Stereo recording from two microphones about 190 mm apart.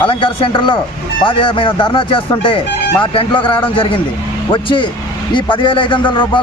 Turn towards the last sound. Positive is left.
turn(degrees=25)  # may be behind; listen again after turning